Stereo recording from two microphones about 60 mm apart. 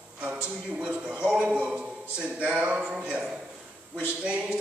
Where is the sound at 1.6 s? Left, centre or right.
Centre.